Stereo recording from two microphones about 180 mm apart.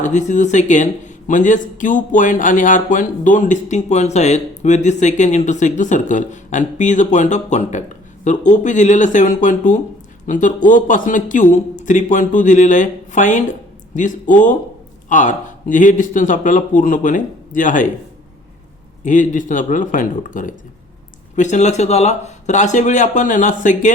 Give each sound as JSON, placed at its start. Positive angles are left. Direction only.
{"t": 0.0, "sound": "speech", "side_deg": 40}
{"t": 19.0, "sound": "speech", "side_deg": 45}